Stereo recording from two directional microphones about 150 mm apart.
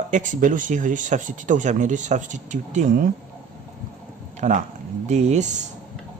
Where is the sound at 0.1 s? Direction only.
60° right (ahead or behind).